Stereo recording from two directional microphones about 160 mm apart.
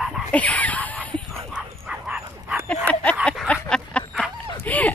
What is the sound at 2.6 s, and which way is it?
Fowl, 10° left (ahead or behind).